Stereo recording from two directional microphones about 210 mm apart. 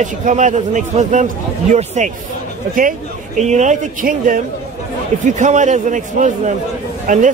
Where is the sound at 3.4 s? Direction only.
35° right (ahead or behind).